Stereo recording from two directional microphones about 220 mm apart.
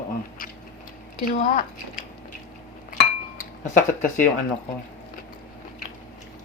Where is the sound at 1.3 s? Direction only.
35° left (ahead or behind).